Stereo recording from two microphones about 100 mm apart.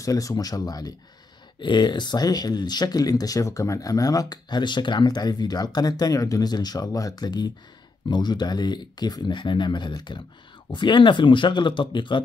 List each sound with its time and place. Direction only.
0.0 s speech: 35° left (ahead or behind)
1.6 s speech: 50° left (ahead or behind)